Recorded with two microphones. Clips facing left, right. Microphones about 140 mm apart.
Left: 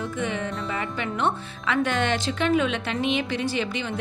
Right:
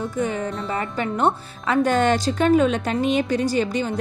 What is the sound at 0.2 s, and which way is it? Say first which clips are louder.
A woman's voice: right 5 dB; 40° right (ahead or behind).